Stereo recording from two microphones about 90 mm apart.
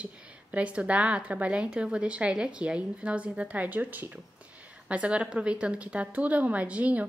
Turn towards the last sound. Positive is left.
turn(degrees=-15)  # may be behind; listen again after turning